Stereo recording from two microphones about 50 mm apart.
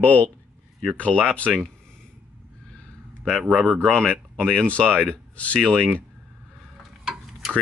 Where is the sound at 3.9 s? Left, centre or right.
Left.